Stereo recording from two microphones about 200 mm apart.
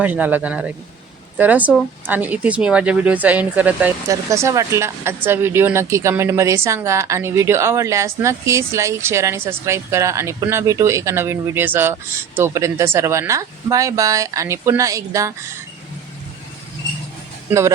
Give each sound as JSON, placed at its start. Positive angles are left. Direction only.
{"t": 0.0, "sound": "speech", "side_deg": -10}